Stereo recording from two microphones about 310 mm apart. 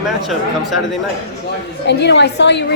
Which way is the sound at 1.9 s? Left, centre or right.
Left.